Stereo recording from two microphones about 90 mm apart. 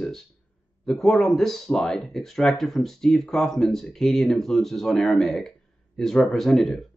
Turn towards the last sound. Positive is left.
turn(degrees=5)  # may be behind; listen again after turning